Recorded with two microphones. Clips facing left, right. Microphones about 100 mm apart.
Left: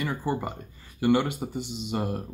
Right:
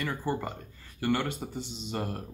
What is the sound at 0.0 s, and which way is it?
A man's voice, 15° left (ahead or behind).